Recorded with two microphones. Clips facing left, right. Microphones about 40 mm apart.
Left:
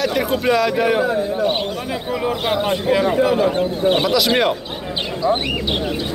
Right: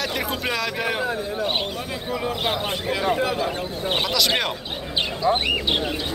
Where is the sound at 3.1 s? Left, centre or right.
Centre.